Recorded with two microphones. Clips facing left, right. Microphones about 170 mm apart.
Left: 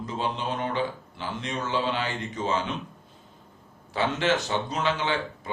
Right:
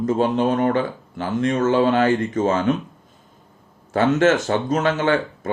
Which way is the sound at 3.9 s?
45° right (ahead or behind).